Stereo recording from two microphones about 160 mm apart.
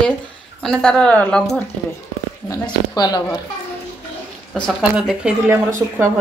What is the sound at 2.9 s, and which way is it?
Speech, 25° left (ahead or behind).